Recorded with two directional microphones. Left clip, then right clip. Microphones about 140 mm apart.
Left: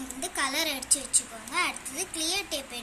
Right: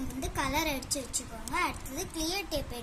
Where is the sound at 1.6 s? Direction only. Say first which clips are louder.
Left 3 dB; 65° right (ahead or behind).